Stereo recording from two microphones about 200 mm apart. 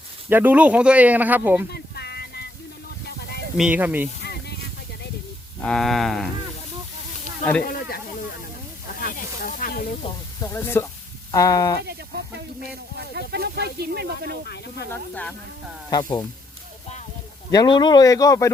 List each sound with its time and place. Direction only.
0.3 s speech: 10° right (ahead or behind)
1.7 s a sound: 55° left (ahead or behind)
3.6 s speech: 10° right (ahead or behind)
5.6 s speech: centre (ahead or behind)
7.6 s snake: 45° left (ahead or behind)
10.4 s speech: 10° left (ahead or behind)
11.8 s speech: 55° right (ahead or behind)
14.4 s speech: 55° left (ahead or behind)
14.8 s speech: 5° left (ahead or behind)
15.9 s speech: 20° left (ahead or behind)
17.5 s speech: 20° left (ahead or behind)